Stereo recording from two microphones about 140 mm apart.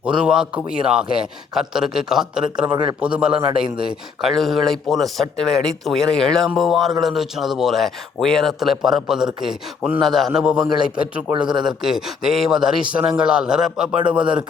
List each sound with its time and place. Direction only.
0.0 s a man's voice: 5° right (ahead or behind)
11.3 s speech: 35° right (ahead or behind)
11.6 s speech: 5° right (ahead or behind)